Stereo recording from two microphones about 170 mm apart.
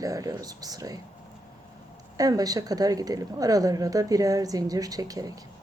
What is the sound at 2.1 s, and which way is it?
A woman's voice, 20° right (ahead or behind).